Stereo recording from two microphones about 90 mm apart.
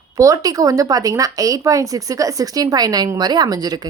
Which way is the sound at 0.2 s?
40° right (ahead or behind).